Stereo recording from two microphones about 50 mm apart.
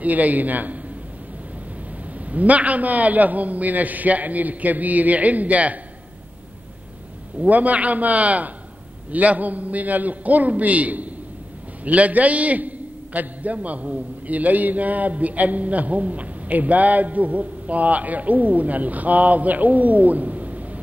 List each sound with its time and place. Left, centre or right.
0.0 s a man's voice: right
2.2 s a man's voice: right
7.4 s a man's voice: right